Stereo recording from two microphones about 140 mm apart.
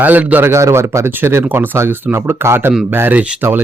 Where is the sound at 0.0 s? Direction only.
10° right (ahead or behind).